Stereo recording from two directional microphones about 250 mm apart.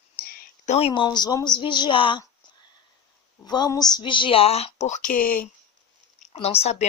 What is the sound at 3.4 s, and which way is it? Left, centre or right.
Speech, centre.